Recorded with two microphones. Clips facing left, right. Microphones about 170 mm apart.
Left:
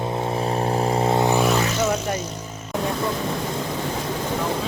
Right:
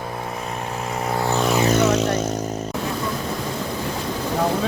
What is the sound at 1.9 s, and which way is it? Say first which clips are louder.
Vehicle: right 5 dB; 75° right (ahead or behind).